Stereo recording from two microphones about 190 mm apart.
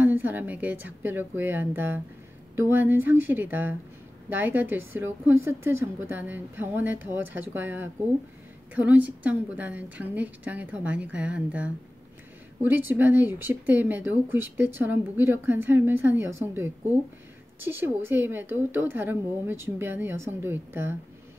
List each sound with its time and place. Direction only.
0.0 s speech: 10° right (ahead or behind)